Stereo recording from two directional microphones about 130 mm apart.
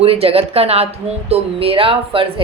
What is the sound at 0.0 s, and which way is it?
A woman's voice, 50° right (ahead or behind).